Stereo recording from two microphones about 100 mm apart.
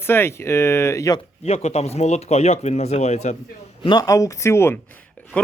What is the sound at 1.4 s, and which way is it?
Speech, 90° left.